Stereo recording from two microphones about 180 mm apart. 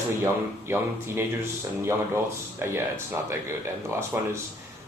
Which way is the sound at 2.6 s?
15° right (ahead or behind).